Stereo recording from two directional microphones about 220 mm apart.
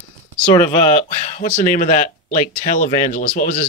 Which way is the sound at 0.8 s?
30° left (ahead or behind).